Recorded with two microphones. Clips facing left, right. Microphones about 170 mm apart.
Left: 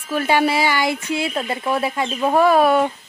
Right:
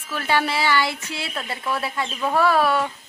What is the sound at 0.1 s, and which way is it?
A woman's voice, 15° left (ahead or behind).